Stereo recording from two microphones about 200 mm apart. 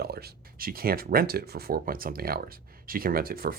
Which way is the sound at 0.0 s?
50° right (ahead or behind).